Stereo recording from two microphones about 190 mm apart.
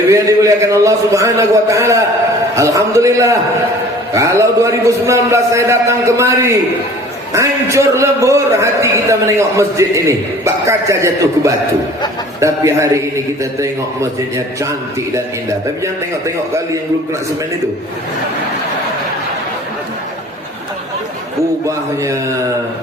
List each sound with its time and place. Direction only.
0.1 s a man's voice: 15° right (ahead or behind)